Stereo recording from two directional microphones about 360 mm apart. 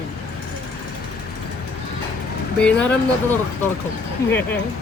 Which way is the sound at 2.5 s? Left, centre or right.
Centre.